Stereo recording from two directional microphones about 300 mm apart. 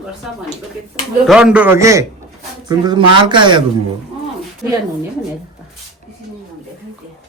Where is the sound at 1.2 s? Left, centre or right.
Centre.